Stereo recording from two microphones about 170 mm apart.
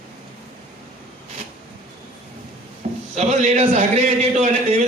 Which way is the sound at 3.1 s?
40° right (ahead or behind).